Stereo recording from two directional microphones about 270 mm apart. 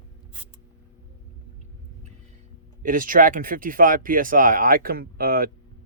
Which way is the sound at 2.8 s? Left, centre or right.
Right.